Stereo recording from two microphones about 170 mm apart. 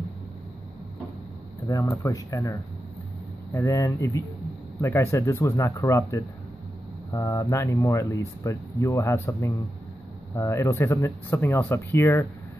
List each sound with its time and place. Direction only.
1.7 s speech: 15° left (ahead or behind)
3.5 s speech: 15° left (ahead or behind)